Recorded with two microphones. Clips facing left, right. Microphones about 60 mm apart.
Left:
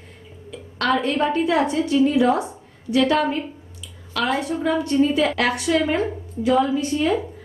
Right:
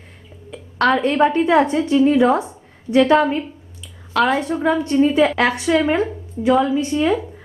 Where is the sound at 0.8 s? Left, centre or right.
Right.